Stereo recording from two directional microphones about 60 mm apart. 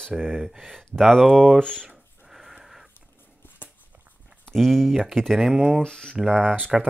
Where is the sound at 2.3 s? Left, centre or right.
Centre.